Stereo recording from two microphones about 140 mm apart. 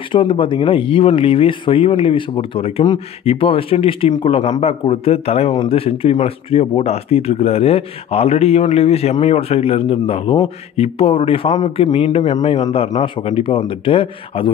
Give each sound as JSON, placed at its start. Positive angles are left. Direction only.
{"t": 0.1, "sound": "speech", "side_deg": 35}